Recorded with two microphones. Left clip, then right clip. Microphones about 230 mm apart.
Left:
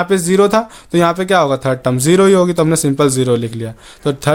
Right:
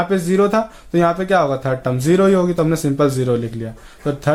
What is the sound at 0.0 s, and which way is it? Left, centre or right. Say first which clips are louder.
Speech: left 4 dB; left.